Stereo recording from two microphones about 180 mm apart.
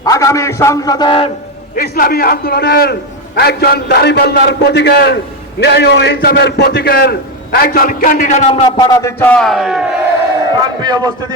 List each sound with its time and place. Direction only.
0.0 s a man's voice: 20° left (ahead or behind)
1.7 s a man's voice: 55° left (ahead or behind)
8.7 s a man's voice: 20° left (ahead or behind); by 10.0 s 5° right (ahead or behind)
10.8 s a man's voice: 20° right (ahead or behind)